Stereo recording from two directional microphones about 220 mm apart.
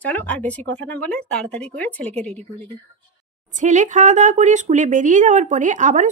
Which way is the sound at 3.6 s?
35° right (ahead or behind).